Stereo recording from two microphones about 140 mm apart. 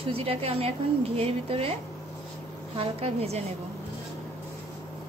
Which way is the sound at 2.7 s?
45° right (ahead or behind).